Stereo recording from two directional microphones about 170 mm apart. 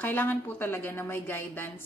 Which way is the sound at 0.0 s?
10° left (ahead or behind).